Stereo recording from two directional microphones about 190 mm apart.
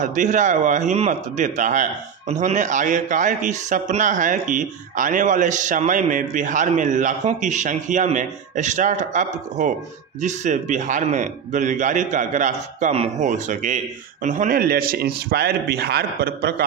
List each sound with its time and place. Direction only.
0.0 s speech: 40° right (ahead or behind)